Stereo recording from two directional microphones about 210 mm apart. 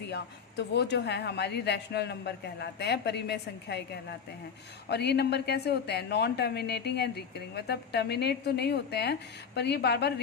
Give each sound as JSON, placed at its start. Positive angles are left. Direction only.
{"t": 0.1, "sound": "a woman's voice", "side_deg": 55}
{"t": 4.9, "sound": "a woman's voice", "side_deg": 50}